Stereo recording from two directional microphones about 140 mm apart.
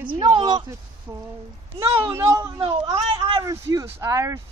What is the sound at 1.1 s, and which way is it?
Speech, 15° right (ahead or behind).